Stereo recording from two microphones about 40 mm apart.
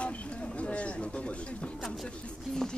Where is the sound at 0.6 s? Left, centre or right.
Left.